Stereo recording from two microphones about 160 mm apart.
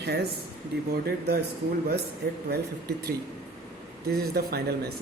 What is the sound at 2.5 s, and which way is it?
Speech, 75° right (ahead or behind).